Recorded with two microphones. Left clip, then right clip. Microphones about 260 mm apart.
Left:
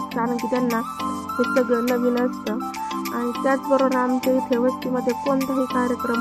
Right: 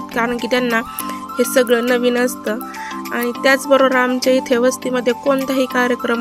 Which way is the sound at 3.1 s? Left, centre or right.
Right.